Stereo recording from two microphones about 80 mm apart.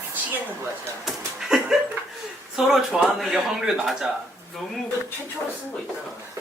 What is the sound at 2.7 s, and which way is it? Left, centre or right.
Speech, centre.